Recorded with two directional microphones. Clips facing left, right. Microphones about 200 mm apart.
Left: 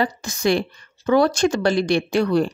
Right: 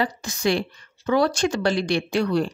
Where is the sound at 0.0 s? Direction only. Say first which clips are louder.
Left 2 dB; 45° left (ahead or behind).